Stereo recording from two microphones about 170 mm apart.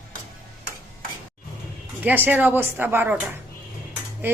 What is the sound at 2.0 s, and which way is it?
Speech, 10° right (ahead or behind).